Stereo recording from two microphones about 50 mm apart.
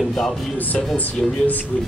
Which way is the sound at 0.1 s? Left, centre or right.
Centre.